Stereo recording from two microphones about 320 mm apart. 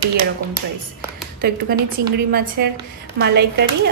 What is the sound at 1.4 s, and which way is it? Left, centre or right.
A woman's voice, right.